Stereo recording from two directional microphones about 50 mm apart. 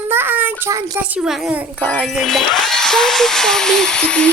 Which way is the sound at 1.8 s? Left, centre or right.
Left.